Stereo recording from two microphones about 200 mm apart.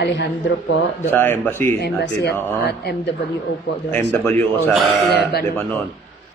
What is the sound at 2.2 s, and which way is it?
Speech, 55° left (ahead or behind).